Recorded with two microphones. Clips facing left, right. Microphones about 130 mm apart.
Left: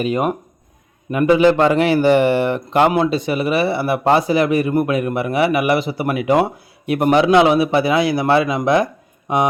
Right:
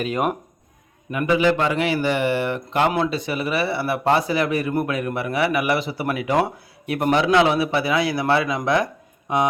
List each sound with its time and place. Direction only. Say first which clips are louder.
0.0 s speech: left 4 dB; centre (ahead or behind)
1.1 s speech: left 6 dB; 35° left (ahead or behind); by 8.9 s 20° left (ahead or behind)